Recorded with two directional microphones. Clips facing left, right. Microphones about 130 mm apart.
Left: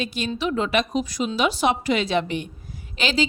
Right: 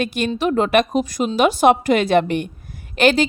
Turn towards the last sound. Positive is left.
turn(degrees=-60)  # may be behind; listen again after turning